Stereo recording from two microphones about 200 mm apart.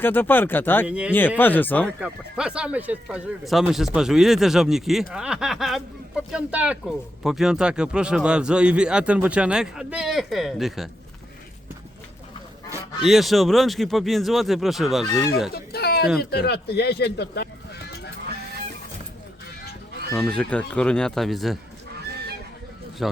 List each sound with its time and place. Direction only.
0.0 s speech: 10° left (ahead or behind)
0.9 s speech: 5° right (ahead or behind)
1.4 s speech: 10° left (ahead or behind)
2.0 s speech: 5° right (ahead or behind)
13.1 s speech: centre (ahead or behind)
15.0 s speech: 15° left (ahead or behind)
15.5 s a sound: 50° left (ahead or behind)
16.3 s speech: 50° left (ahead or behind)
20.1 s speech: 5° left (ahead or behind)
23.0 s speech: centre (ahead or behind)